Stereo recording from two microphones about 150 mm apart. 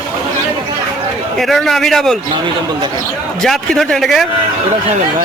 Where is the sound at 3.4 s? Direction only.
Centre (ahead or behind).